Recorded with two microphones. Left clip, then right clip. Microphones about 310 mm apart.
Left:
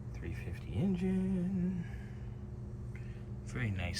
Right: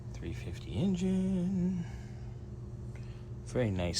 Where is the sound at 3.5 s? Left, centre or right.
Centre.